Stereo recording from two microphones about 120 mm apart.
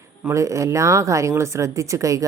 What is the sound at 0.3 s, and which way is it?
Speech, 25° right (ahead or behind).